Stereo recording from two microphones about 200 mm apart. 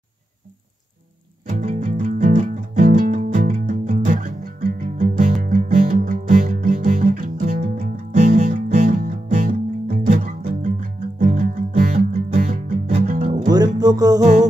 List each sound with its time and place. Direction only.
1.5 s music: 35° right (ahead or behind)
13.5 s music: 20° right (ahead or behind)